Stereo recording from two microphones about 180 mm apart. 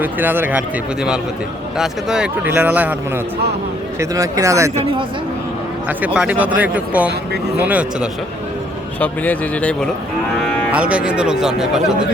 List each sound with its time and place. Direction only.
0.0 s speech: 10° right (ahead or behind)
1.8 s speech: 5° right (ahead or behind)
4.1 s speech: 20° right (ahead or behind)
4.7 s speech: 35° right (ahead or behind)
6.1 s speech: 10° right (ahead or behind)
9.0 s speech: 10° left (ahead or behind)
10.7 s speech: 5° right (ahead or behind)